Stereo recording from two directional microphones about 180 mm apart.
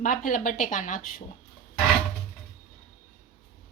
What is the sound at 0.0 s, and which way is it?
Speech, 50° left (ahead or behind).